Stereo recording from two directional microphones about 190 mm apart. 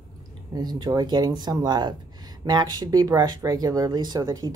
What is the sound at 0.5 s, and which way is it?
Speech, 20° right (ahead or behind).